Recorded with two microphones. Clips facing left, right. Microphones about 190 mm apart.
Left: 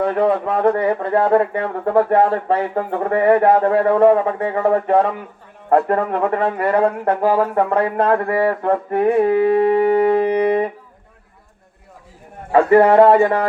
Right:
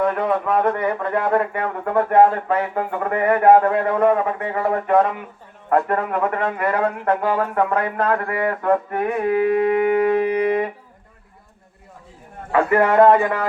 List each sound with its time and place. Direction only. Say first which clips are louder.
0.0 s speech: left 3 dB; 30° left (ahead or behind)
12.5 s speech: left 5 dB; 30° left (ahead or behind)